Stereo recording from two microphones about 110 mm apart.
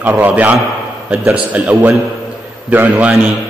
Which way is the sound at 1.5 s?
15° right (ahead or behind).